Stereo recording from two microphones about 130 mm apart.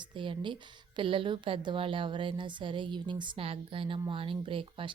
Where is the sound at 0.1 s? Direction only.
40° right (ahead or behind).